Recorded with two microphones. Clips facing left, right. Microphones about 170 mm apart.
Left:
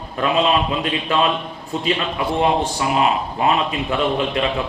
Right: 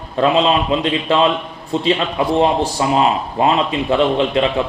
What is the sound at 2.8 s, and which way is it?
A man's voice, 30° right (ahead or behind).